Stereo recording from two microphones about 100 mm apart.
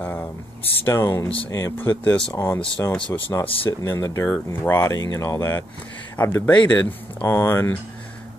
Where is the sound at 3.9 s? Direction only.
30° left (ahead or behind).